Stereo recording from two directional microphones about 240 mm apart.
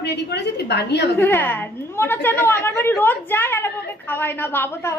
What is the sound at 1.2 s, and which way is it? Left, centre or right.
A woman's voice, centre.